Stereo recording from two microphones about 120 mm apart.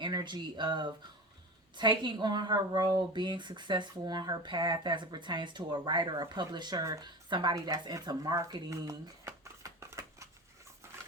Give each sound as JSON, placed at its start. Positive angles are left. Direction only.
{"t": 0.0, "sound": "speech", "side_deg": -35}